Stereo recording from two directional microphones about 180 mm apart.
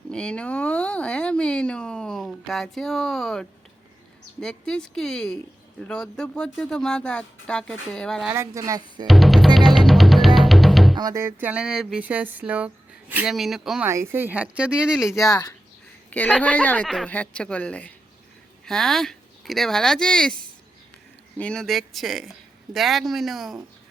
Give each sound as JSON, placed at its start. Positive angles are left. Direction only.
{"t": 0.1, "sound": "speech", "side_deg": 5}
{"t": 8.3, "sound": "a sound", "side_deg": -15}
{"t": 9.0, "sound": "speech", "side_deg": 0}
{"t": 9.6, "sound": "music", "side_deg": 0}
{"t": 10.9, "sound": "a sound", "side_deg": -20}
{"t": 13.8, "sound": "a sound", "side_deg": -15}
{"t": 15.3, "sound": "speech", "side_deg": 20}
{"t": 16.0, "sound": "speech", "side_deg": 10}
{"t": 21.3, "sound": "speech", "side_deg": 5}